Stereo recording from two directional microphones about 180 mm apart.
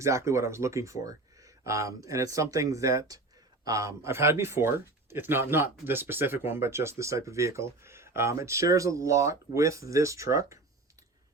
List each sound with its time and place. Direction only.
0.0 s speech: 15° right (ahead or behind)